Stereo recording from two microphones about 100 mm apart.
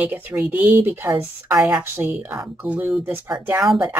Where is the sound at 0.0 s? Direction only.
15° right (ahead or behind).